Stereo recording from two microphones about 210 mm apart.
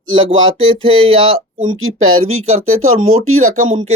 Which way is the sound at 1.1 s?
25° right (ahead or behind).